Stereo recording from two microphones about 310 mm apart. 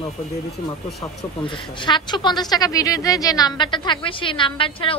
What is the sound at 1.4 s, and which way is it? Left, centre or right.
A woman's voice, centre.